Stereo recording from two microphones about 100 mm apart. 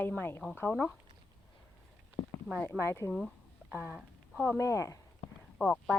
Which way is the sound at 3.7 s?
15° right (ahead or behind).